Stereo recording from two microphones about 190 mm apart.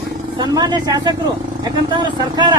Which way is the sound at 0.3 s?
20° right (ahead or behind).